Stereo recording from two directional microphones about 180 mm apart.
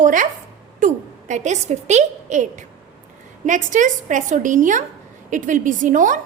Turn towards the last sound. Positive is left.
turn(degrees=-45)  # may be behind; listen again after turning